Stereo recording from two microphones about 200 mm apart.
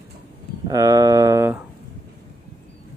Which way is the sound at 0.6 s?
15° right (ahead or behind).